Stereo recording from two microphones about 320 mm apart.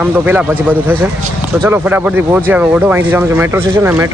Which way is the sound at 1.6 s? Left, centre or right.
Centre.